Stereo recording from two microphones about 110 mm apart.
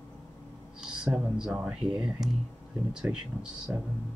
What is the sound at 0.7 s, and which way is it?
Speech, 5° right (ahead or behind).